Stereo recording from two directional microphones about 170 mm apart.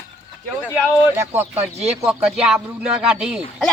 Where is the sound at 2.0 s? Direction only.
5° right (ahead or behind).